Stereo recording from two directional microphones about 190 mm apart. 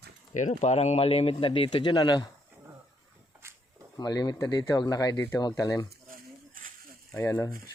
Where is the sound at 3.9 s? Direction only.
20° left (ahead or behind).